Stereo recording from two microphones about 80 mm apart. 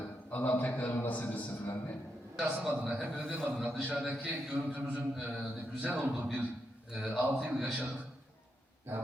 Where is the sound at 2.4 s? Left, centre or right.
Centre.